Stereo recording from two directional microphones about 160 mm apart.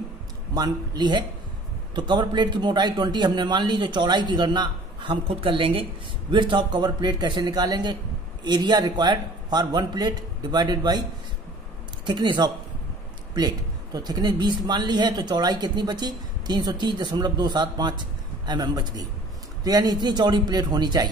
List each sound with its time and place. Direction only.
0.6 s a man's voice: 25° right (ahead or behind)
12.1 s a man's voice: 25° right (ahead or behind)